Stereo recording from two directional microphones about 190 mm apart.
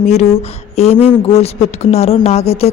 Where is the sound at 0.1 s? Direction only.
35° left (ahead or behind).